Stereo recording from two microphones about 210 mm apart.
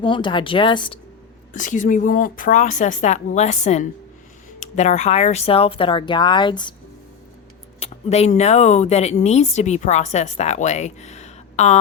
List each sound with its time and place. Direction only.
0.0 s speech: 25° left (ahead or behind)
1.5 s speech: 35° left (ahead or behind); by 6.7 s 20° left (ahead or behind)
7.8 s speech: 30° left (ahead or behind)